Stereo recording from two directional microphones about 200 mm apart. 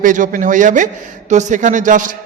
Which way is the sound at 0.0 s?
40° right (ahead or behind).